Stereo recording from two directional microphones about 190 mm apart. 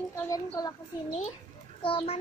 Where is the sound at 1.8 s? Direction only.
30° left (ahead or behind).